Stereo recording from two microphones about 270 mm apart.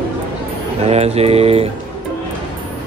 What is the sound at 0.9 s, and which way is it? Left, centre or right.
Mantra, right.